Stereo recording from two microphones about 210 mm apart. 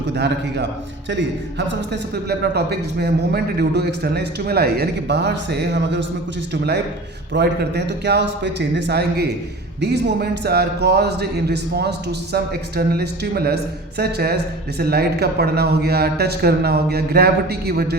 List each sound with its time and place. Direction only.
0.2 s speech: 55° right (ahead or behind)